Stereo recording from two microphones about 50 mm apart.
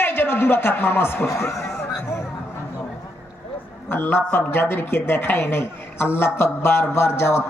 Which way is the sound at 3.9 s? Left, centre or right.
Left.